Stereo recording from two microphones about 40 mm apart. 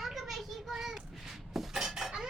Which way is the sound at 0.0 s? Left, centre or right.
Centre.